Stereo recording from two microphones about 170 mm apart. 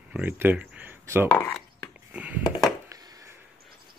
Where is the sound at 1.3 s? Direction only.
10° left (ahead or behind).